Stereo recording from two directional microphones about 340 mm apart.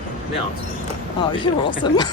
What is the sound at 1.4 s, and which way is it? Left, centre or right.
Speech, centre.